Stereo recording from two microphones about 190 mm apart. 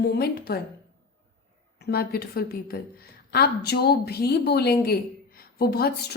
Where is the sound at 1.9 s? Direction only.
55° left (ahead or behind).